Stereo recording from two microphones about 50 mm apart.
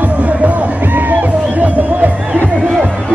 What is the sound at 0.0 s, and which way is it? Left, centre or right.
Music, right.